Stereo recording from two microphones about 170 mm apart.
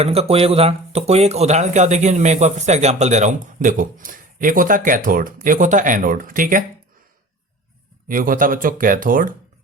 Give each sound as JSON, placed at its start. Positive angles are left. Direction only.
{"t": 0.0, "sound": "speech", "side_deg": -35}
{"t": 8.0, "sound": "speech", "side_deg": -55}